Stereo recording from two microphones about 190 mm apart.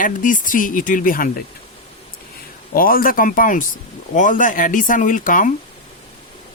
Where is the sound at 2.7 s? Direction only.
50° left (ahead or behind).